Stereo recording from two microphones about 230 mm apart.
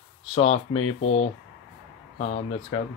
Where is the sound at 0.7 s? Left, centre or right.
Left.